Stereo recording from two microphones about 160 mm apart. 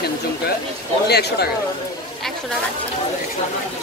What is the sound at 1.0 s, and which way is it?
Speech, 90° left.